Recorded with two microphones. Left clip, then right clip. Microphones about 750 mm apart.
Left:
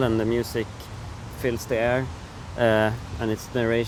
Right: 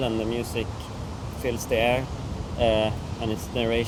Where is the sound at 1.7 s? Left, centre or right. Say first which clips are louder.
Right 1 dB; left.